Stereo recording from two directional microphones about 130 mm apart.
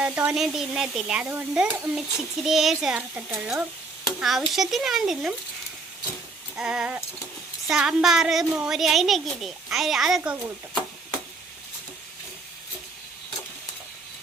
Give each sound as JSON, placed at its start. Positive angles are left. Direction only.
{"t": 0.0, "sound": "speech", "side_deg": -10}
{"t": 6.6, "sound": "speech", "side_deg": -5}